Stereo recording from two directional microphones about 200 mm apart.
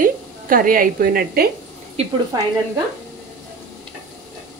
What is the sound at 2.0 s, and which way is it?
Speech, 30° right (ahead or behind).